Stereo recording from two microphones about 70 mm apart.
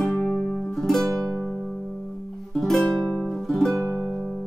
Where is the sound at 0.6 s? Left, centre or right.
Centre.